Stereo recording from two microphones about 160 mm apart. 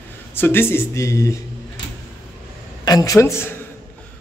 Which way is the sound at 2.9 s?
20° left (ahead or behind).